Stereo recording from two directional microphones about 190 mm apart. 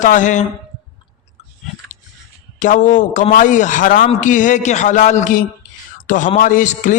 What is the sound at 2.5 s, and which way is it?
A man's voice, 40° left (ahead or behind).